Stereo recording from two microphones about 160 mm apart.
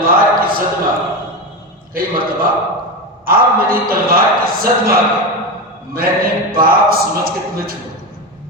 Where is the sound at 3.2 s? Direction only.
65° right (ahead or behind).